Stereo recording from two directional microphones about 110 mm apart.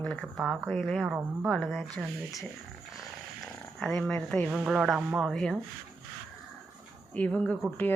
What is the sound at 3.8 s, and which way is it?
Speech, 5° left (ahead or behind).